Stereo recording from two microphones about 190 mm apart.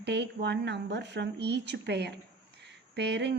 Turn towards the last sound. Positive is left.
turn(degrees=-65)  # may be behind; listen again after turning